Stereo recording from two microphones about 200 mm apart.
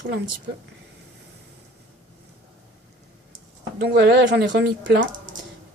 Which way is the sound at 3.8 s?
55° right (ahead or behind).